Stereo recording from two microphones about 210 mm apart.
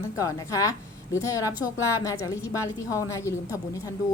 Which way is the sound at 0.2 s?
15° left (ahead or behind).